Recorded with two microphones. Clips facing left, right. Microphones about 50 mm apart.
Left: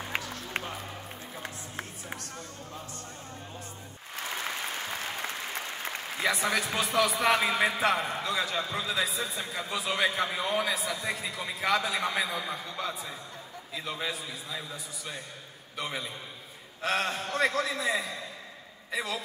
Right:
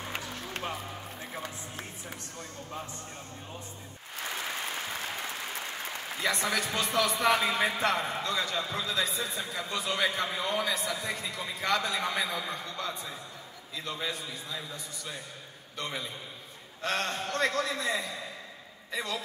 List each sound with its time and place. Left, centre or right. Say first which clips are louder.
1.4 s music: left 1 dB; left
6.2 s a man's voice: left 2 dB; centre